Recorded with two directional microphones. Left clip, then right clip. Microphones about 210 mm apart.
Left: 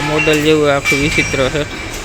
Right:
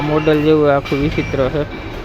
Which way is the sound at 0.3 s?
Centre (ahead or behind).